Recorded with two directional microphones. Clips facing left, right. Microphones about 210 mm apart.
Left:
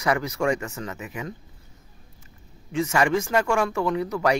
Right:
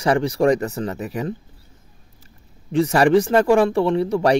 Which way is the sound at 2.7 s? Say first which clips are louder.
Right 7 dB; 35° right (ahead or behind).